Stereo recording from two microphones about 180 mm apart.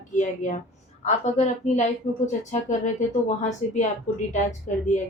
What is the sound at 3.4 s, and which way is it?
A woman's voice, 40° left (ahead or behind).